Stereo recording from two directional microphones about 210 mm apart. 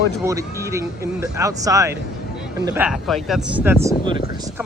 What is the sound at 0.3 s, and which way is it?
Speech, 15° right (ahead or behind).